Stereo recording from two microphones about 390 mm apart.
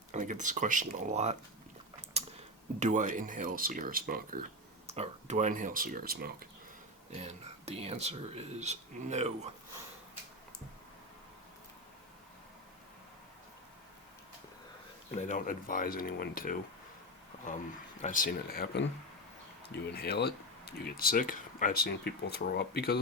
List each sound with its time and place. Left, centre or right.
0.1 s speech: centre
2.8 s speech: centre
15.1 s speech: centre
17.3 s a sound: centre
18.0 s speech: left